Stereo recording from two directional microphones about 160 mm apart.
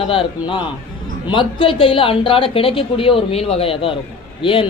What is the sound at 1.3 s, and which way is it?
A man's voice, 30° left (ahead or behind).